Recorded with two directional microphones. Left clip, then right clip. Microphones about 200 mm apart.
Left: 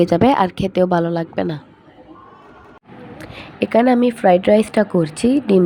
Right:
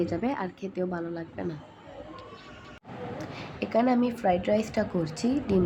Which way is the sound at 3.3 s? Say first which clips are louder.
Left 11 dB; 35° left (ahead or behind).